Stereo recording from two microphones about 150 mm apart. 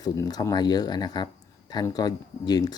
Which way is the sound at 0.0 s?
25° left (ahead or behind).